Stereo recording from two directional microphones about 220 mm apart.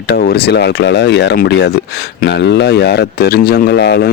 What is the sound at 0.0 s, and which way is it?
Speech, 45° left (ahead or behind).